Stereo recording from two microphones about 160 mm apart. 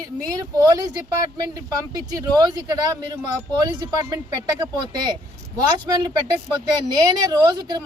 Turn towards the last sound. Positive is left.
turn(degrees=-25)  # may be behind; listen again after turning